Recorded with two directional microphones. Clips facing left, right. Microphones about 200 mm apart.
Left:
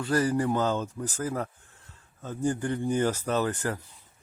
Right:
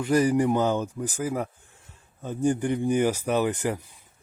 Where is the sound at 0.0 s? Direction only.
15° right (ahead or behind).